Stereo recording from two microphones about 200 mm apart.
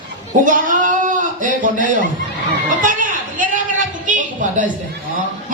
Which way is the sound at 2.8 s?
40° right (ahead or behind).